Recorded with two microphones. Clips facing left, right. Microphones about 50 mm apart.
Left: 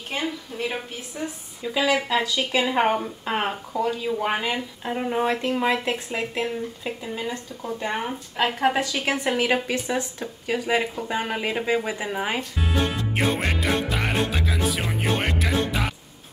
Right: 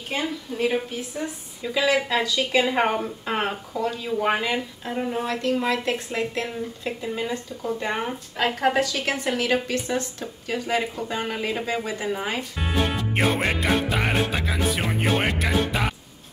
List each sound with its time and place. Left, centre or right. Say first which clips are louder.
0.5 s speech: right 5 dB; centre
12.4 s speech: left 1 dB; centre
13.1 s music: right 2 dB; centre